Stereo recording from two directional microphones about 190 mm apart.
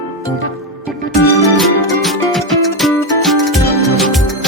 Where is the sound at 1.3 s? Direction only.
15° left (ahead or behind).